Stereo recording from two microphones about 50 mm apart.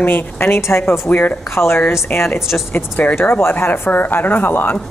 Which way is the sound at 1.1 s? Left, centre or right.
Left.